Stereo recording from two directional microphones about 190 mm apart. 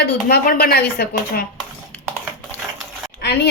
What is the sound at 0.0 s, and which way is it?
A woman's voice, 55° left (ahead or behind).